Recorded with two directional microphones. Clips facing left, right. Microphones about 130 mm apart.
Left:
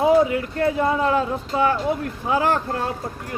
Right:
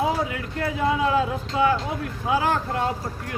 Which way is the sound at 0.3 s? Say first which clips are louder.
Left 7 dB; 35° left (ahead or behind).